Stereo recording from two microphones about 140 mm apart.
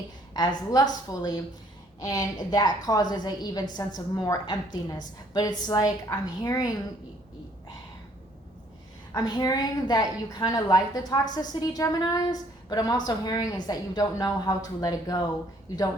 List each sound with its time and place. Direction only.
0.3 s a woman's voice: 25° left (ahead or behind)
9.1 s a woman's voice: 30° left (ahead or behind)